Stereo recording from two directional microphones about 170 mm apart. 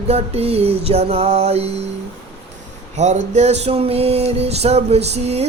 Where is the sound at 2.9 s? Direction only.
40° right (ahead or behind).